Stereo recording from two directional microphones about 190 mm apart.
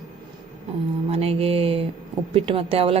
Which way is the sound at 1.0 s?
30° right (ahead or behind).